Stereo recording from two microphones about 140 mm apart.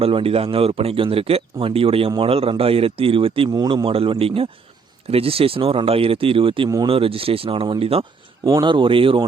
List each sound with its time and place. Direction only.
0.0 s speech: 40° right (ahead or behind)
3.5 s speech: 30° right (ahead or behind)
3.8 s speech: 40° right (ahead or behind)
8.4 s speech: 25° right (ahead or behind)
8.7 s speech: 35° right (ahead or behind)